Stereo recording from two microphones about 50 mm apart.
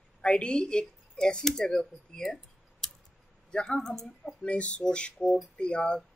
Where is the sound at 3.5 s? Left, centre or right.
Centre.